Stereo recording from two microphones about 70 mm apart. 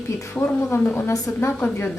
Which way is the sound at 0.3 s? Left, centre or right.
Left.